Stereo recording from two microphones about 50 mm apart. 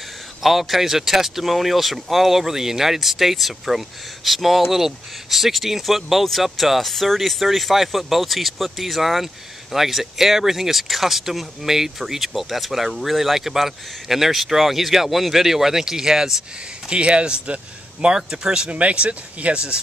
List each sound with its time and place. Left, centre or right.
0.4 s speech: centre
16.9 s speech: right